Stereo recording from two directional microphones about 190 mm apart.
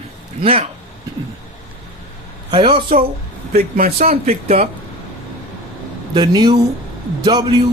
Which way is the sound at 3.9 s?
35° right (ahead or behind).